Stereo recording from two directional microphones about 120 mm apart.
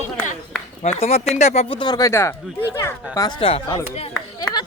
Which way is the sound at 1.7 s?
35° left (ahead or behind).